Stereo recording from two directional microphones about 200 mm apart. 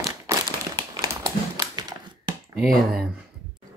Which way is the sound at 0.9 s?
15° right (ahead or behind).